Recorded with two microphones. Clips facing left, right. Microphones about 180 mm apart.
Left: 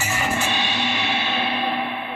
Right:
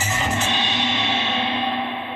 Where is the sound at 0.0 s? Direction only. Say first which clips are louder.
Even; 10° left (ahead or behind).